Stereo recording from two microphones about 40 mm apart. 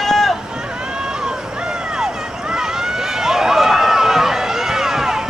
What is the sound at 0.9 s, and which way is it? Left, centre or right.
Vehicle, centre.